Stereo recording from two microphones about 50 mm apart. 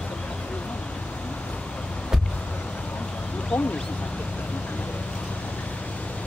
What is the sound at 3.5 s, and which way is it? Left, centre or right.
Speech, left.